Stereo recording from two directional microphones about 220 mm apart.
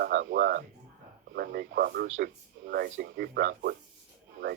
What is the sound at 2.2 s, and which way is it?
Speech, 45° right (ahead or behind).